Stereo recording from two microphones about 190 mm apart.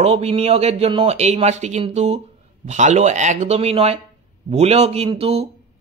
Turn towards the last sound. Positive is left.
turn(degrees=-30)  # may be behind; listen again after turning